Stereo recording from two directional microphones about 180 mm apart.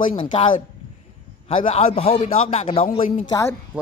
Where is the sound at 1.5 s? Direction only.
30° left (ahead or behind).